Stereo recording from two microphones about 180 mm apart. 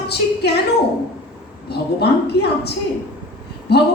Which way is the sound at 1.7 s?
65° left (ahead or behind).